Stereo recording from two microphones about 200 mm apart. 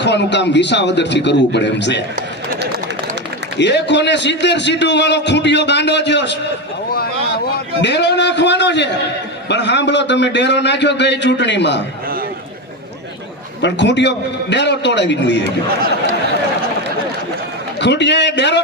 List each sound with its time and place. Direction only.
0.0 s a man's voice: 60° left (ahead or behind)
3.6 s a man's voice: 60° left (ahead or behind)
7.8 s a man's voice: 60° left (ahead or behind)
13.6 s a man's voice: 60° left (ahead or behind)
17.7 s a man's voice: 60° left (ahead or behind)